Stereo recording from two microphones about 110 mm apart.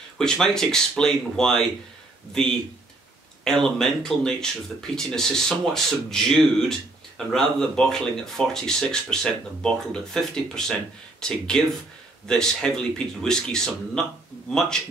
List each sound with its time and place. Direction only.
0.2 s speech: 5° left (ahead or behind)
3.4 s speech: 5° left (ahead or behind)